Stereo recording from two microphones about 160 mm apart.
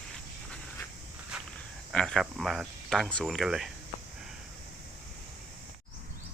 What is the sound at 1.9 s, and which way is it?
Speech, centre (ahead or behind).